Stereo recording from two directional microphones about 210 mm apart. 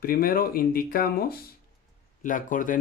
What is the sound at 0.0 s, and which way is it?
Speech, 45° left (ahead or behind).